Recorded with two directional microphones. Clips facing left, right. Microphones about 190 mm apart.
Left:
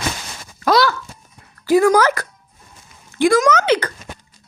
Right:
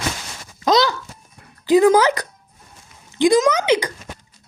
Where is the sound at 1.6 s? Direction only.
20° right (ahead or behind).